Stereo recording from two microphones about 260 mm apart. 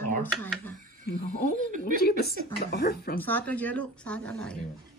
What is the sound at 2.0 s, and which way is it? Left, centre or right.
Speech, left.